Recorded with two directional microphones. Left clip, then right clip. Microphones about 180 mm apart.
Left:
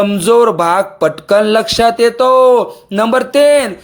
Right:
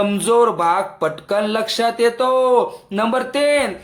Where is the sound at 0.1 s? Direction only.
35° left (ahead or behind).